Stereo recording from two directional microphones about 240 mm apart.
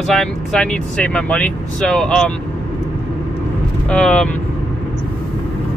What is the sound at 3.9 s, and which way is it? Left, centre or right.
Speech, centre.